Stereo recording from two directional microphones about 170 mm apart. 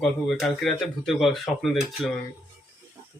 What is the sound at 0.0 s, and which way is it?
Speech, centre (ahead or behind).